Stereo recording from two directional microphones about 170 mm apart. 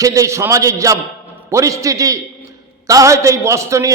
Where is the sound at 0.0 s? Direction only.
20° right (ahead or behind).